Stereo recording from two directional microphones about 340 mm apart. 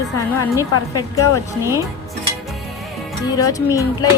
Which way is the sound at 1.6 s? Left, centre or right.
Centre.